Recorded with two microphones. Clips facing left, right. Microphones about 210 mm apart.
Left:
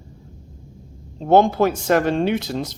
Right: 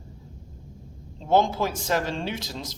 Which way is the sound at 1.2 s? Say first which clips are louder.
Left 7 dB; 60° left (ahead or behind).